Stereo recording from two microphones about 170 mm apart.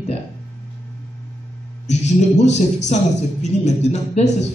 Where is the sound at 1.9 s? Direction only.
40° left (ahead or behind).